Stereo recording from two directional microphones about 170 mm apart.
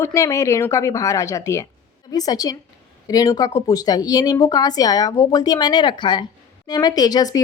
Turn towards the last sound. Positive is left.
turn(degrees=20)  # may be behind; listen again after turning